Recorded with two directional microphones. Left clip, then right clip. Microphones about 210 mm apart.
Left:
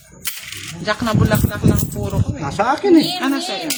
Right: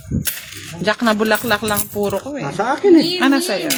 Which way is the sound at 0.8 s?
35° right (ahead or behind).